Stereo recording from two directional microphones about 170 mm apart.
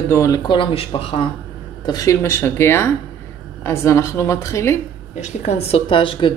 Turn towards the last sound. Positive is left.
turn(degrees=30)  # may be behind; listen again after turning